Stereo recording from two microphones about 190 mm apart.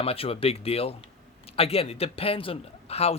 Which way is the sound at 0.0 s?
30° left (ahead or behind).